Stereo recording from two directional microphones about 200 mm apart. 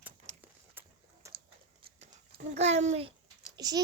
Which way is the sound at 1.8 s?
25° right (ahead or behind).